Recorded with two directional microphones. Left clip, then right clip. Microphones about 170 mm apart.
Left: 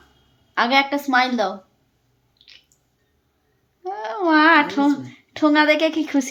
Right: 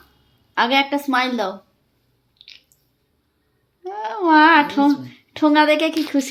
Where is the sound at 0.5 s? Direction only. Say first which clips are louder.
Even; 5° right (ahead or behind).